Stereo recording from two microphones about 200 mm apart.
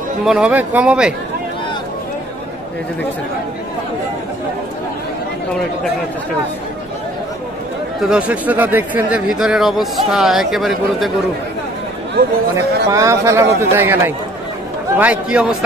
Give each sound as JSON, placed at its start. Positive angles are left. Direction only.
{"t": 0.2, "sound": "speech", "side_deg": -5}
{"t": 8.0, "sound": "speech", "side_deg": -5}
{"t": 12.5, "sound": "a man's voice", "side_deg": -15}